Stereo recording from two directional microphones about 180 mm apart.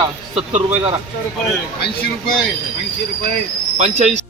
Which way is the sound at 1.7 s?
60° left (ahead or behind).